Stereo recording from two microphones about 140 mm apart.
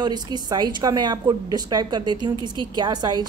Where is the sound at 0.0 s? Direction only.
30° right (ahead or behind).